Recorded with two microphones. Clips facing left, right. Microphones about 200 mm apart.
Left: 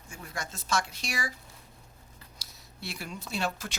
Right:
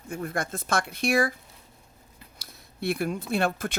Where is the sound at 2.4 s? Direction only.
55° right (ahead or behind).